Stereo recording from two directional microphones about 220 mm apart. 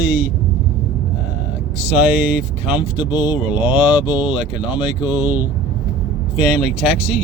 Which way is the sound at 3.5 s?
5° right (ahead or behind).